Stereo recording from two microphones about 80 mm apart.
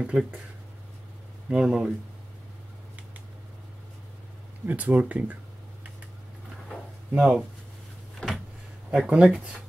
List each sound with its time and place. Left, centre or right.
0.0 s speech: centre
1.5 s speech: centre
4.6 s speech: centre
7.2 s speech: centre
8.2 s a sound: centre
9.0 s speech: centre